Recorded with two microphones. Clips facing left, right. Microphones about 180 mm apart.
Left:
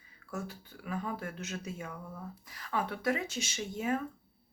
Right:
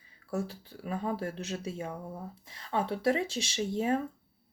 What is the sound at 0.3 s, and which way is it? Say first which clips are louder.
Speech: right 6 dB; 30° right (ahead or behind).